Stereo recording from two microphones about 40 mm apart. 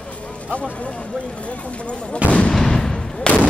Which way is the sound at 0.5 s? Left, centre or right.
Left.